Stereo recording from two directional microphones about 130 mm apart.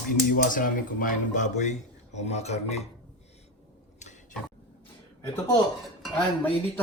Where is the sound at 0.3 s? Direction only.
90° left; by 2.8 s 55° left (ahead or behind).